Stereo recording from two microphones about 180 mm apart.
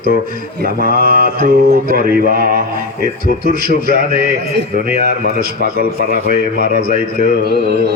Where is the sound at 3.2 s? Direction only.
45° left (ahead or behind).